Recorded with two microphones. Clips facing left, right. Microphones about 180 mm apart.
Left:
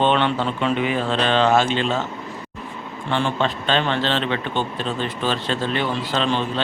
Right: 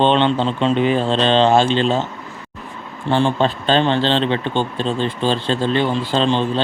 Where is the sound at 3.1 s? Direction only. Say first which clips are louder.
Right 5 dB; 35° right (ahead or behind).